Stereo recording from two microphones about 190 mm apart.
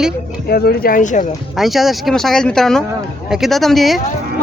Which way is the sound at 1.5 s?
Centre (ahead or behind).